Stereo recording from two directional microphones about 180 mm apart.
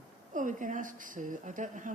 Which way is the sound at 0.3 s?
45° right (ahead or behind).